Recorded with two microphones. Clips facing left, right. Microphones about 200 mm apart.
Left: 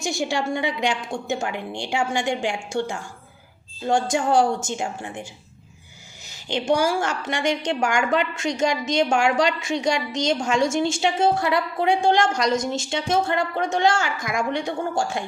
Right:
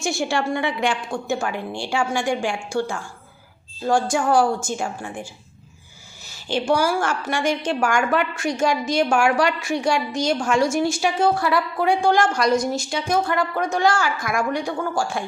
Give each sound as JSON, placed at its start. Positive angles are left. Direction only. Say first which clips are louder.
{"t": 0.0, "sound": "a woman's voice", "louder": "right 2 dB", "side_deg": 15}